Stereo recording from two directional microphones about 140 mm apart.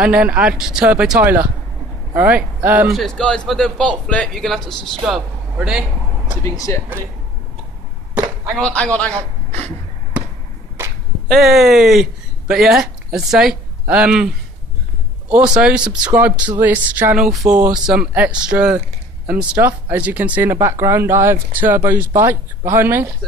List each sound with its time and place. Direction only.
0.0 s speech: 10° right (ahead or behind)
2.9 s speech: centre (ahead or behind)
6.4 s speech: 20° left (ahead or behind)
8.6 s a man's voice: 10° left (ahead or behind)
11.2 s speech: centre (ahead or behind)
15.3 s speech: 10° right (ahead or behind)